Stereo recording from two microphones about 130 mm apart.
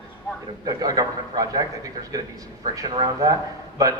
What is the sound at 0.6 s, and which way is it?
A man's voice, 30° right (ahead or behind).